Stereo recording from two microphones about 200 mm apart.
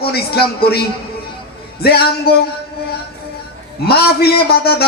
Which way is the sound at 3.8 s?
50° left (ahead or behind).